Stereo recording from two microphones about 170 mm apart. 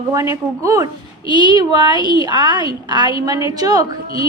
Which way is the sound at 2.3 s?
25° right (ahead or behind).